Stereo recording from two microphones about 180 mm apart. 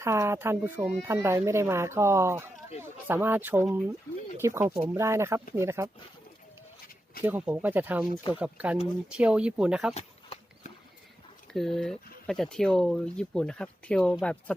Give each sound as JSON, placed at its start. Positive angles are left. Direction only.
{"t": 0.0, "sound": "speech", "side_deg": -15}
{"t": 7.3, "sound": "speech", "side_deg": -10}
{"t": 9.9, "sound": "horse", "side_deg": 35}
{"t": 11.5, "sound": "speech", "side_deg": 0}